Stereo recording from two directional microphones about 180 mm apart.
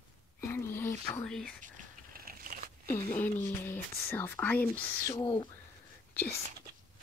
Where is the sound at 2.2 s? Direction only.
55° right (ahead or behind).